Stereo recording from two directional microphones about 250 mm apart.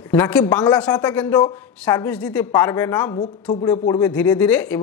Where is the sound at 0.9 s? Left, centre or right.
Centre.